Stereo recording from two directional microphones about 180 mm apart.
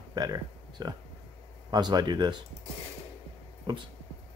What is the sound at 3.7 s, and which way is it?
Speech, 25° right (ahead or behind).